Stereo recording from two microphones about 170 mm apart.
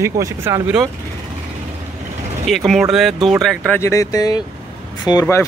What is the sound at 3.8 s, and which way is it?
Speech, 15° left (ahead or behind).